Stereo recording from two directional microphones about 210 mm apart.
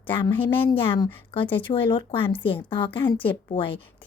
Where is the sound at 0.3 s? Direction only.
25° left (ahead or behind).